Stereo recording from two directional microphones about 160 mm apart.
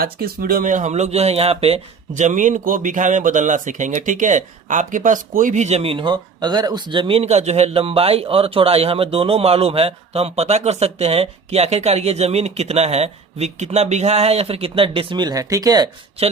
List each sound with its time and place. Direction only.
0.0 s speech: 70° right (ahead or behind); by 15.9 s 25° right (ahead or behind)